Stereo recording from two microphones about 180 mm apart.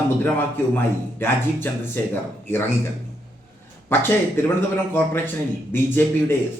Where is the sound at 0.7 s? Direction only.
10° left (ahead or behind).